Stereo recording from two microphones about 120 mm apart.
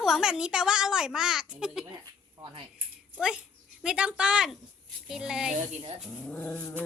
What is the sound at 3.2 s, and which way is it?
A woman's voice, 10° right (ahead or behind).